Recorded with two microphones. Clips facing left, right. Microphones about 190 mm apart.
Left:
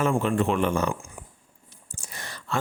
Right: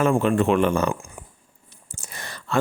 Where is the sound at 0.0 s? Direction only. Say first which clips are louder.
Right 4 dB; 75° right (ahead or behind).